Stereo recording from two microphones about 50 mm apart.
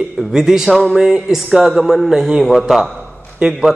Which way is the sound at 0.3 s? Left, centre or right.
Centre.